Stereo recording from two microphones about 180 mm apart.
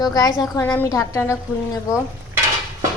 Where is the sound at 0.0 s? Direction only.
20° left (ahead or behind).